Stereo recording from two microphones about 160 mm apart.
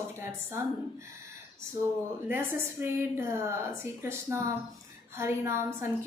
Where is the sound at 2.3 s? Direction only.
15° right (ahead or behind).